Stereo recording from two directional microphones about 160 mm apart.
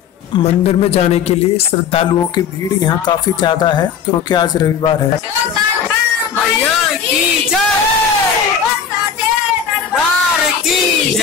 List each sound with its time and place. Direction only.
0.4 s a man's voice: 40° left (ahead or behind)